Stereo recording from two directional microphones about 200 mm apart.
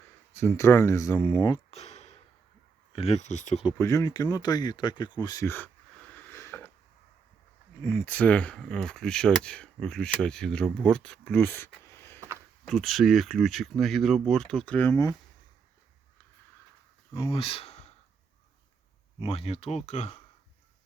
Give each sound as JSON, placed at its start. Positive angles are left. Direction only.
{"t": 0.3, "sound": "speech", "side_deg": 15}
{"t": 3.8, "sound": "speech", "side_deg": 15}
{"t": 6.1, "sound": "a sound", "side_deg": 10}
{"t": 7.8, "sound": "speech", "side_deg": 10}
{"t": 11.9, "sound": "a sound", "side_deg": 10}
{"t": 12.6, "sound": "speech", "side_deg": 0}
{"t": 17.2, "sound": "speech", "side_deg": 25}
{"t": 19.2, "sound": "speech", "side_deg": 30}